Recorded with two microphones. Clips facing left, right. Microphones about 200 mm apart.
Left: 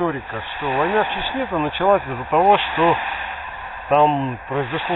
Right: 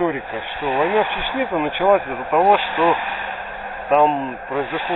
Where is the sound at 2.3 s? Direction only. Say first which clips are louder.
Even; 5° right (ahead or behind).